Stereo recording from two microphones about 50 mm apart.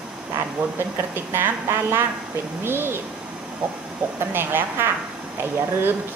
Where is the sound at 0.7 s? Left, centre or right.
Right.